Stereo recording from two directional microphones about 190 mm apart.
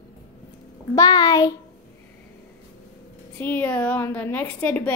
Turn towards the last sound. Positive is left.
turn(degrees=5)  # may be behind; listen again after turning